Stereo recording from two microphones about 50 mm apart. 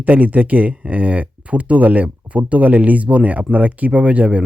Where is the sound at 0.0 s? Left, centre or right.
Right.